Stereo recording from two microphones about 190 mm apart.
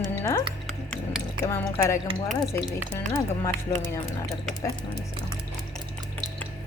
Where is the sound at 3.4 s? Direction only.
15° left (ahead or behind).